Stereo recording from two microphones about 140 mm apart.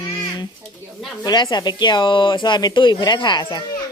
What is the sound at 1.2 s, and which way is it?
Speech, 30° left (ahead or behind).